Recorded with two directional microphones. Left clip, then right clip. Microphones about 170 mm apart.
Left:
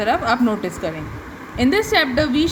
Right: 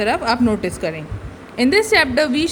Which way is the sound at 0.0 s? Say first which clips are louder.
Even; 40° right (ahead or behind).